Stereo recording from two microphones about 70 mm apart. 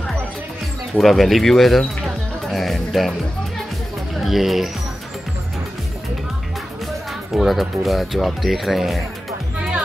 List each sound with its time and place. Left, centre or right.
0.9 s speech: centre
4.2 s speech: centre
7.3 s speech: centre